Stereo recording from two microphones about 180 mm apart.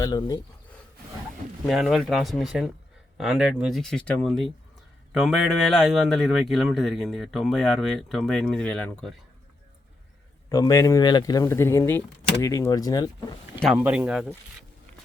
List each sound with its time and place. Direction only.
0.0 s speech: 20° left (ahead or behind)
1.6 s a man's voice: centre (ahead or behind)
10.5 s speech: 20° left (ahead or behind)
13.8 s speech: 5° right (ahead or behind)